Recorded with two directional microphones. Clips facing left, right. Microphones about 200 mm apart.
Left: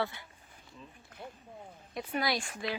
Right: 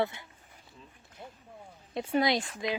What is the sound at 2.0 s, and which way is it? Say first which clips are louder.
Speech: right 6 dB; 25° right (ahead or behind).